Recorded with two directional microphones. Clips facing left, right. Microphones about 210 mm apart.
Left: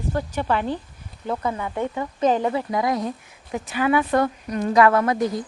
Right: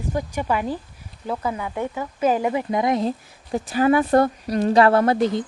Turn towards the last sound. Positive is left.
turn(degrees=-25)  # may be behind; listen again after turning